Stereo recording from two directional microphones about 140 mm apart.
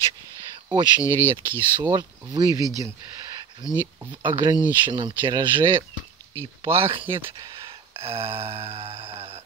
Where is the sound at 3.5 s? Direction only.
30° right (ahead or behind).